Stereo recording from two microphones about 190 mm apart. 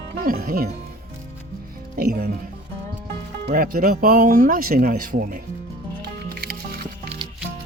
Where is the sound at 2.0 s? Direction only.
55° right (ahead or behind).